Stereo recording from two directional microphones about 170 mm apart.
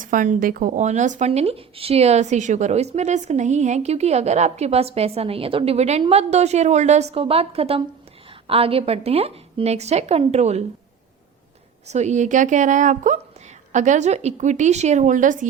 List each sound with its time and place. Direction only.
0.0 s speech: 50° right (ahead or behind)
11.9 s a woman's voice: 45° right (ahead or behind)